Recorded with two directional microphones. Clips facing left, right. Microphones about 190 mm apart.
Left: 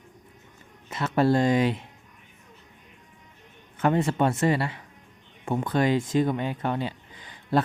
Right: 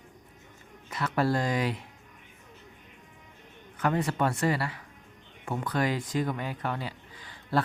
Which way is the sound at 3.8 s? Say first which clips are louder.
Left 4 dB; 25° left (ahead or behind).